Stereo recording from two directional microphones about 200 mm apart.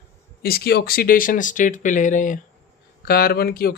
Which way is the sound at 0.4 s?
50° left (ahead or behind).